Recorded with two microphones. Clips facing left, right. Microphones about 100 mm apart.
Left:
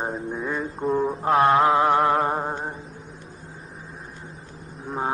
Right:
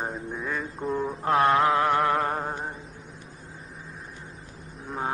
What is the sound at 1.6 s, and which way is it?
Mantra, 20° left (ahead or behind).